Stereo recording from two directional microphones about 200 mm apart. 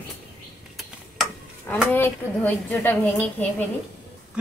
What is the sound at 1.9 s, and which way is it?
Speech, 10° left (ahead or behind).